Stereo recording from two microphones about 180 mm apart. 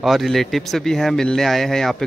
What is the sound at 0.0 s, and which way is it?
Speech, centre (ahead or behind).